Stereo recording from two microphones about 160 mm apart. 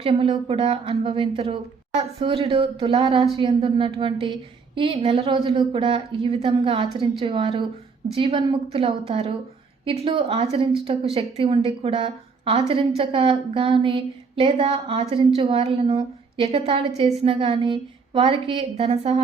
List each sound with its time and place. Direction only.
0.0 s a woman's voice: 35° right (ahead or behind)